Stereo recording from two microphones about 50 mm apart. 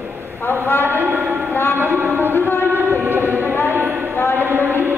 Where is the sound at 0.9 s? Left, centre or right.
Right.